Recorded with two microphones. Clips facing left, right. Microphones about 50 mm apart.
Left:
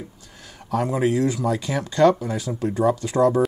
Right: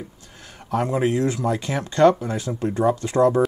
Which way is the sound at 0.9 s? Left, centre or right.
Right.